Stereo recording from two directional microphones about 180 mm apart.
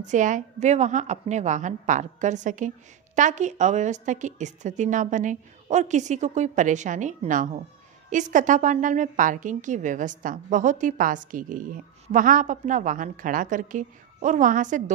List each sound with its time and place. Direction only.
0.0 s a woman's voice: 45° right (ahead or behind)